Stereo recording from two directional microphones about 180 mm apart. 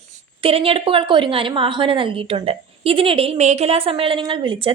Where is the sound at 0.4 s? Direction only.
30° right (ahead or behind).